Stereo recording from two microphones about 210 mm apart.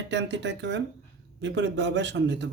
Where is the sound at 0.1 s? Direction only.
55° right (ahead or behind).